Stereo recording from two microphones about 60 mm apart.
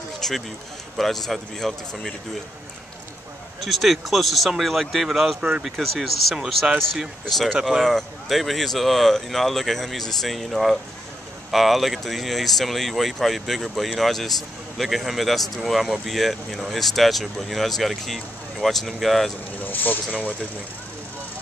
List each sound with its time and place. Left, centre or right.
0.2 s speech: centre
3.6 s speech: centre
7.2 s speech: centre
19.6 s speech: left